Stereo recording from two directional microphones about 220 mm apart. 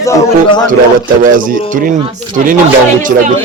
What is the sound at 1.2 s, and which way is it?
A man's voice, 40° right (ahead or behind).